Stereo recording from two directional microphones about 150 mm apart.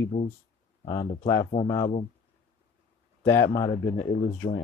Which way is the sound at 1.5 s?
45° left (ahead or behind).